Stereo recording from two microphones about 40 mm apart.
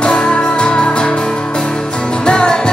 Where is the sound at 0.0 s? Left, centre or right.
Left.